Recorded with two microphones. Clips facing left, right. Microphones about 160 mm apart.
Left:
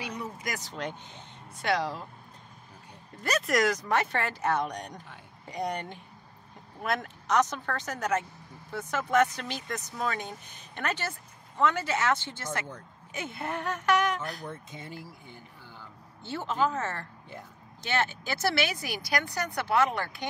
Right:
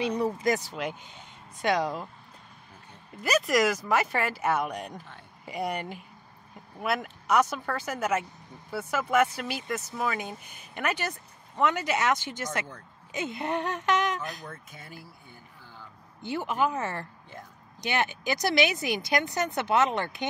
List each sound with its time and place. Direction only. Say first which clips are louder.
0.0 s speech: right 10 dB; 30° right (ahead or behind)
0.6 s speech: right 2 dB; 10° right (ahead or behind)
3.2 s speech: right 2 dB; 5° right (ahead or behind); by 14.4 s 20° right (ahead or behind)
14.4 s speech: left 3 dB; 20° left (ahead or behind)
16.2 s speech: right 1 dB; 15° right (ahead or behind)